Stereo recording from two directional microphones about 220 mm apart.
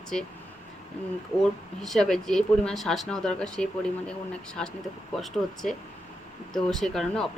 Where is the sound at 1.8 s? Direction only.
Centre (ahead or behind).